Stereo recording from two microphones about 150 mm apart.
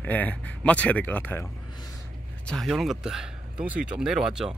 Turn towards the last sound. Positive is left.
turn(degrees=-5)  # may be behind; listen again after turning